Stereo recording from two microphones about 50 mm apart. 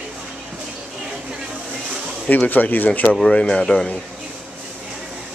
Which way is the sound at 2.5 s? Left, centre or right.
Left.